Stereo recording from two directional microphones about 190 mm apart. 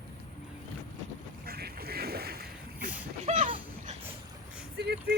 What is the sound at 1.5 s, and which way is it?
Boat, 55° right (ahead or behind).